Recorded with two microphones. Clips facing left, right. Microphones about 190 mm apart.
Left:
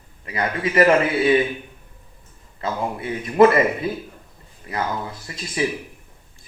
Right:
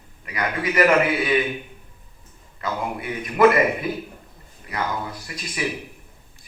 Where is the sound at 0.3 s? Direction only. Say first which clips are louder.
Left 3 dB; 30° left (ahead or behind).